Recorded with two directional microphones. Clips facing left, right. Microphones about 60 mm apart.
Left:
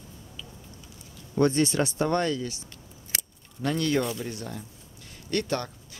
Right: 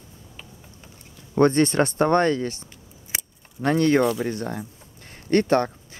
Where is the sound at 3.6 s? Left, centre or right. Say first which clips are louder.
Right 7 dB; right.